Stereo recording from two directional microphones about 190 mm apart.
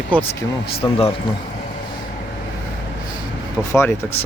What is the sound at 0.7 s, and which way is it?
Speech, 30° left (ahead or behind).